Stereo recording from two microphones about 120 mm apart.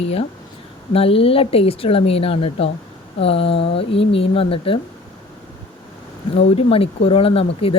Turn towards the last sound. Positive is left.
turn(degrees=50)  # may be behind; listen again after turning